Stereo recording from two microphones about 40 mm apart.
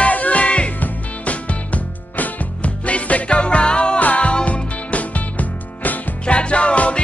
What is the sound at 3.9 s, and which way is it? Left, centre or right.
Music, left.